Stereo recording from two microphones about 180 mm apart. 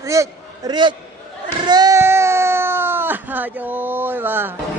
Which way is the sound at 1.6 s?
20° right (ahead or behind).